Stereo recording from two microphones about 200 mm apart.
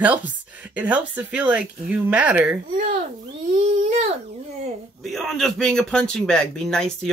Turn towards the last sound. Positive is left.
turn(degrees=5)  # may be behind; listen again after turning